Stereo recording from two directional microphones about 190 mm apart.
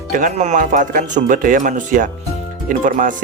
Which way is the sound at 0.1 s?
45° right (ahead or behind).